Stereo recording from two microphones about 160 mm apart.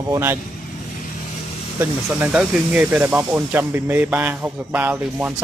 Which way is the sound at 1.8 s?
10° right (ahead or behind).